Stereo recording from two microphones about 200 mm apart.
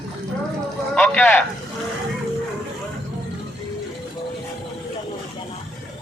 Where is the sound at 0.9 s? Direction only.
5° left (ahead or behind).